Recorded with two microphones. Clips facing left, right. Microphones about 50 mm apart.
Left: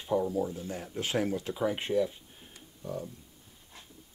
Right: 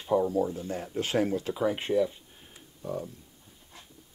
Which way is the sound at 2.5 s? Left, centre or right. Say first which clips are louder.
Right 3 dB; centre.